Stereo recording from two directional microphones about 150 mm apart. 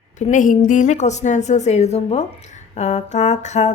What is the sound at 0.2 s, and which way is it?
A woman's voice, 60° left (ahead or behind).